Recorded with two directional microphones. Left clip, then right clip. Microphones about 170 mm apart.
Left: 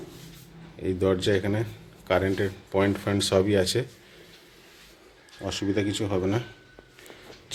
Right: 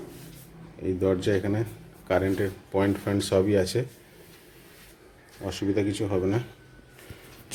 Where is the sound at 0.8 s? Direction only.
Centre (ahead or behind).